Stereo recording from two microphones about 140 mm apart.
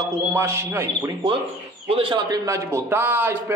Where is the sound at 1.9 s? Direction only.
35° right (ahead or behind).